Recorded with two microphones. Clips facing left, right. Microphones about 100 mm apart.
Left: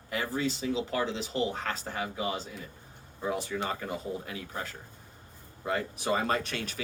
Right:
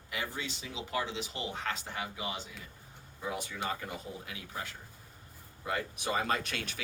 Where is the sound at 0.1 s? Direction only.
40° left (ahead or behind).